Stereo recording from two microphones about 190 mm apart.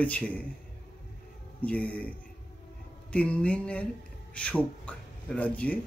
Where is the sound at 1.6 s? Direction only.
5° left (ahead or behind).